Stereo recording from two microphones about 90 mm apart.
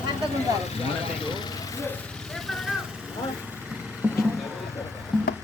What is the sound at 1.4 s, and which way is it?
Vehicle, 45° left (ahead or behind).